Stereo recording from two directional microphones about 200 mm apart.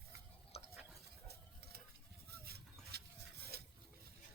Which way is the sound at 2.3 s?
50° right (ahead or behind).